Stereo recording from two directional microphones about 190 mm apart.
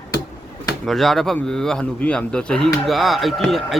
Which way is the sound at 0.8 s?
Centre (ahead or behind).